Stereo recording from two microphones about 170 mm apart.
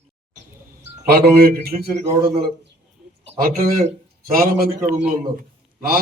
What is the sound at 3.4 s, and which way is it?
A man's voice, 55° right (ahead or behind).